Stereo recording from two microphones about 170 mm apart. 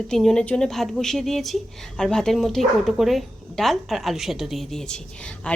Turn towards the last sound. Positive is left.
turn(degrees=5)  # may be behind; listen again after turning